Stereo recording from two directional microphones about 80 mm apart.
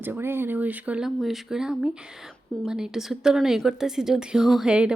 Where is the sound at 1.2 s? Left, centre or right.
Centre.